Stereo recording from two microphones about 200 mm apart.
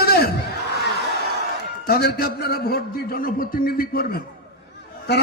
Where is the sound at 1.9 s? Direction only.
50° left (ahead or behind).